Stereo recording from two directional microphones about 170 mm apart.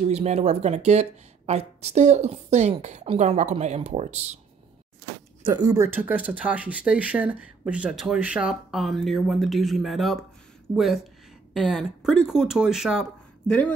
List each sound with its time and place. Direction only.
0.0 s speech: 40° right (ahead or behind)
5.4 s speech: 20° right (ahead or behind)
6.0 s speech: 10° right (ahead or behind)
11.5 s speech: centre (ahead or behind)